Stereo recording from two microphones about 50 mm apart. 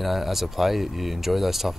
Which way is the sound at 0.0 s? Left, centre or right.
Centre.